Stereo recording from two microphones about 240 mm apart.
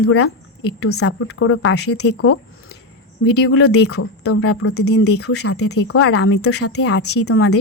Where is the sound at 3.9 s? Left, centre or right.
Left.